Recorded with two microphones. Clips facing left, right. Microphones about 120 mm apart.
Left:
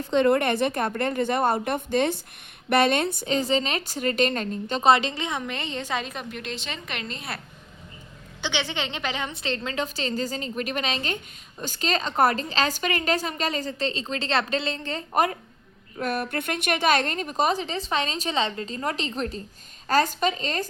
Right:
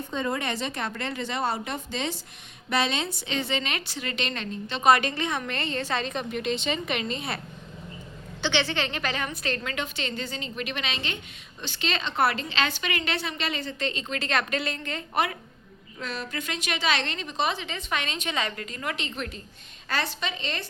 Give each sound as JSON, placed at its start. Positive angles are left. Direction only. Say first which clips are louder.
{"t": 0.1, "sound": "a woman's voice", "louder": "left 10 dB", "side_deg": 70}
{"t": 4.8, "sound": "a woman's voice", "louder": "left 1 dB", "side_deg": 25}
{"t": 8.4, "sound": "a woman's voice", "louder": "right 2 dB", "side_deg": 15}
{"t": 16.0, "sound": "a woman's voice", "louder": "left 6 dB", "side_deg": 55}